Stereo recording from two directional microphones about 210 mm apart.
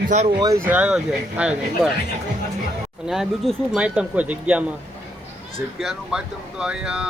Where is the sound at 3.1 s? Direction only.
Centre (ahead or behind).